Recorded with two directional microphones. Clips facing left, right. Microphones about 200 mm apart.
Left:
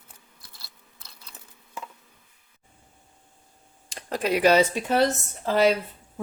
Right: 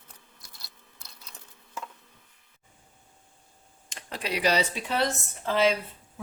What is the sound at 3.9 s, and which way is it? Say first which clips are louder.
Speech: left 8 dB; 40° left (ahead or behind).